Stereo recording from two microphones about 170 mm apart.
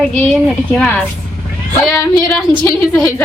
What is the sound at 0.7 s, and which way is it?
Speech, 10° left (ahead or behind).